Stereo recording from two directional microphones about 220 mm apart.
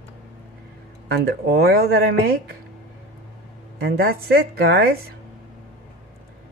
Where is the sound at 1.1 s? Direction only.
45° right (ahead or behind).